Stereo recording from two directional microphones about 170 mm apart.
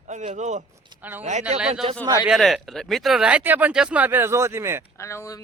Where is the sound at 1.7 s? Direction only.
35° right (ahead or behind).